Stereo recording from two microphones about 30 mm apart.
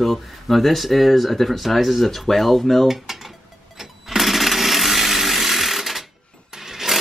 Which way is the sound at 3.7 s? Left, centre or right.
Centre.